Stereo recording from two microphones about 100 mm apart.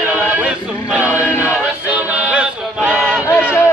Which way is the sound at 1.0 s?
25° left (ahead or behind).